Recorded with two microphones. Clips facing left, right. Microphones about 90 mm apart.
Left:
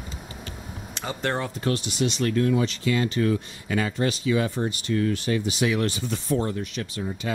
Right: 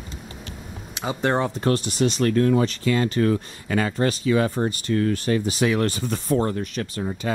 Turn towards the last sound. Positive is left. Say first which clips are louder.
# right 3 dB
turn(degrees=-45)  # may be behind; listen again after turning